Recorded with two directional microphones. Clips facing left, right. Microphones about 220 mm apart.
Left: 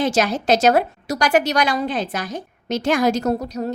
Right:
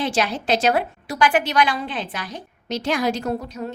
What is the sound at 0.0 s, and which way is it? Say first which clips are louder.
A woman's voice: left 4 dB; 45° left (ahead or behind).